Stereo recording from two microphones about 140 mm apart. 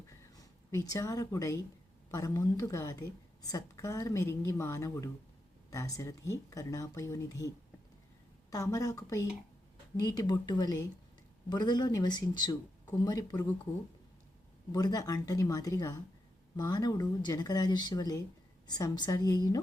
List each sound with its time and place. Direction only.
0.3 s a woman's voice: 25° left (ahead or behind)
14.7 s a woman's voice: 25° left (ahead or behind)